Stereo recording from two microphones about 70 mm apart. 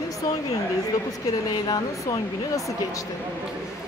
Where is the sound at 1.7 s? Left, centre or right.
Left.